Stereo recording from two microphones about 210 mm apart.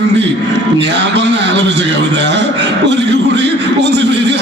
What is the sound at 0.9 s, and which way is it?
Speech, 55° right (ahead or behind).